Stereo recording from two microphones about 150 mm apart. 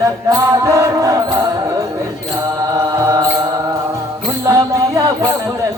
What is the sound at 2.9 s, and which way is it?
Mantra, 20° right (ahead or behind).